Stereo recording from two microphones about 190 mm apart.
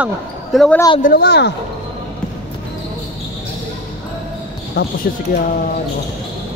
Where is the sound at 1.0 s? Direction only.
55° left (ahead or behind).